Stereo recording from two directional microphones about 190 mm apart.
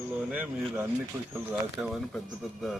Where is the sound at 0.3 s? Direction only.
5° right (ahead or behind).